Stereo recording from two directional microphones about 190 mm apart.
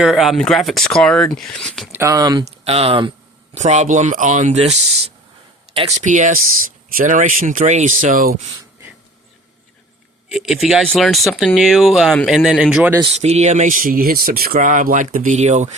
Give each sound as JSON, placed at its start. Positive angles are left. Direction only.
{"t": 0.0, "sound": "speech", "side_deg": 0}
{"t": 1.9, "sound": "speech", "side_deg": -15}
{"t": 2.6, "sound": "speech", "side_deg": -30}
{"t": 10.3, "sound": "speech", "side_deg": -5}
{"t": 13.1, "sound": "speech", "side_deg": -35}